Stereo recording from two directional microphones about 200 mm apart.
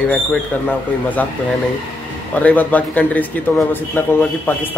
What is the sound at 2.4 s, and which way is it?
Speech, 10° left (ahead or behind).